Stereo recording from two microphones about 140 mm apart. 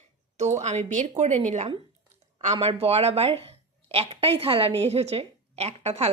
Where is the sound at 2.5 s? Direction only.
45° right (ahead or behind).